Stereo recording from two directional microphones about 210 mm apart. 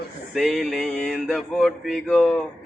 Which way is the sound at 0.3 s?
Centre (ahead or behind).